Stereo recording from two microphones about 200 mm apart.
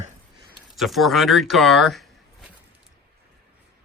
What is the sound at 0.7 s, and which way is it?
Speech, centre (ahead or behind).